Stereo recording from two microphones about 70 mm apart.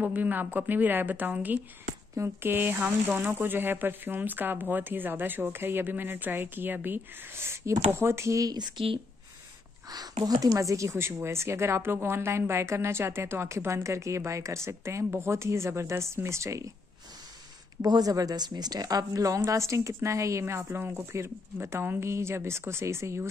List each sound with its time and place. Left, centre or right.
0.0 s speech: right
8.5 s speech: right
9.8 s speech: right
17.8 s speech: right
18.1 s a woman's voice: right